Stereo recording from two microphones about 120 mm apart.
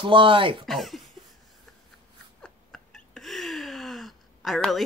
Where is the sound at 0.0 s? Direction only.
45° right (ahead or behind).